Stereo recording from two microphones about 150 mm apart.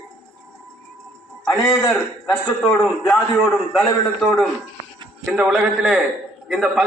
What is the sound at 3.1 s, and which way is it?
Speech, 20° left (ahead or behind).